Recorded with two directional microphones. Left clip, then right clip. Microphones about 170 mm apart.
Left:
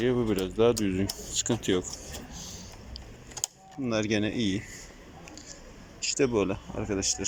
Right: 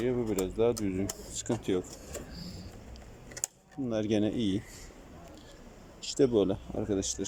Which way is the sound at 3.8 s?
15° right (ahead or behind).